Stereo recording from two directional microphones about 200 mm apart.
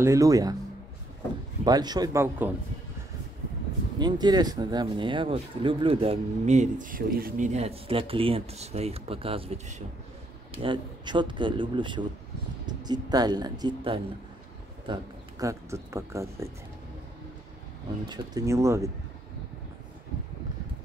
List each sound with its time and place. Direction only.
0.0 s speech: 15° right (ahead or behind)
1.6 s speech: 20° right (ahead or behind)
4.0 s speech: 20° right (ahead or behind)
18.0 s speech: 20° right (ahead or behind)